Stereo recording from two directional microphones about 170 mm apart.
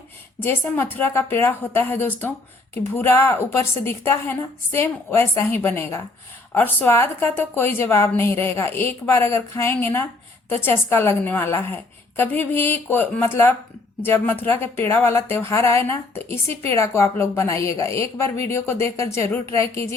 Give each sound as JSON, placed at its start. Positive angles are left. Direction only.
{"t": 0.3, "sound": "speech", "side_deg": 15}